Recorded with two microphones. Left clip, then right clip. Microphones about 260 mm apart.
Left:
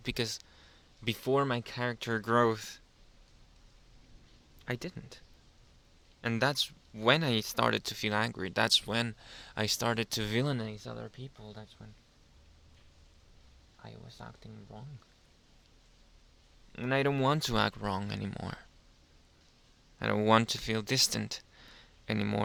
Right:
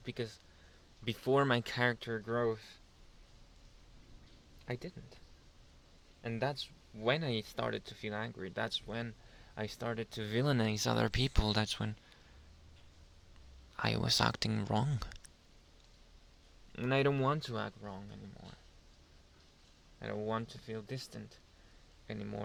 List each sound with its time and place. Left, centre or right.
0.0 s speech: left; by 2.0 s centre
2.0 s speech: left
4.6 s speech: centre
6.2 s speech: left
10.6 s speech: centre; by 11.7 s right
13.8 s speech: right
16.7 s speech: centre
17.2 s speech: centre
17.4 s speech: left
20.0 s speech: left